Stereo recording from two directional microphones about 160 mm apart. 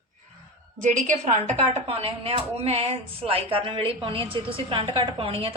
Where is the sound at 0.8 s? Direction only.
50° right (ahead or behind); by 5.6 s 35° right (ahead or behind).